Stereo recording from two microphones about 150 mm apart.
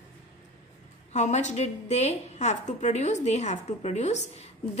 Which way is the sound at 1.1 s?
50° left (ahead or behind).